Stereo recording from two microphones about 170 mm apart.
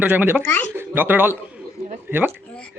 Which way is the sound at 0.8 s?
10° right (ahead or behind).